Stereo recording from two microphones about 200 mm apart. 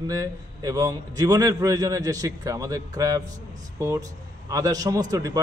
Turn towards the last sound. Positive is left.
turn(degrees=-15)  # may be behind; listen again after turning